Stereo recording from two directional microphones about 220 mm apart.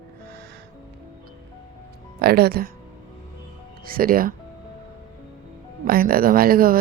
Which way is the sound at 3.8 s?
40° right (ahead or behind).